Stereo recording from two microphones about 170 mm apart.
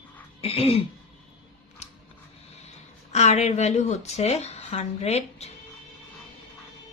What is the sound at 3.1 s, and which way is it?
Speech, 40° left (ahead or behind).